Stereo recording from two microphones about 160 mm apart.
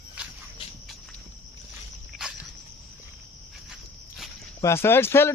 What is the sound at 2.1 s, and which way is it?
Walk, centre (ahead or behind).